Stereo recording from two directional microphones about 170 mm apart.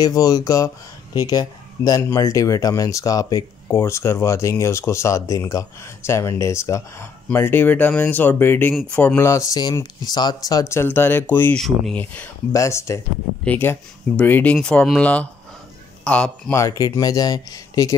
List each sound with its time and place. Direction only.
0.0 s speech: 20° left (ahead or behind)
11.6 s speech: centre (ahead or behind)
12.0 s speech: 15° left (ahead or behind)